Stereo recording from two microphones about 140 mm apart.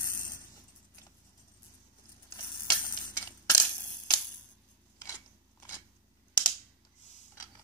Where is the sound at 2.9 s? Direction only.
25° left (ahead or behind).